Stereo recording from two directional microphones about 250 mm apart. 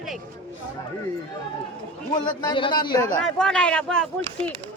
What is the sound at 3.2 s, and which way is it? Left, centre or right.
Speech, centre.